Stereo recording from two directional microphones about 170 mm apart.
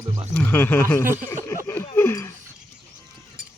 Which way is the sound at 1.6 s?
15° left (ahead or behind).